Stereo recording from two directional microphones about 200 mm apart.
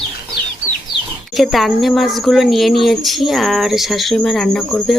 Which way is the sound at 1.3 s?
Centre (ahead or behind).